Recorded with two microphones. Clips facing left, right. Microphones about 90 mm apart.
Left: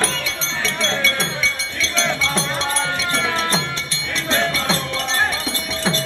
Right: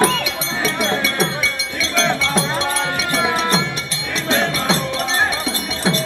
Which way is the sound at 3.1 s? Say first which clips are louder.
Right 5 dB; 20° right (ahead or behind).